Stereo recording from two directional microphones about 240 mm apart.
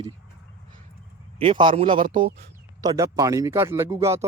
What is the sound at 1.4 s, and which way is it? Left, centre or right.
Speech, right.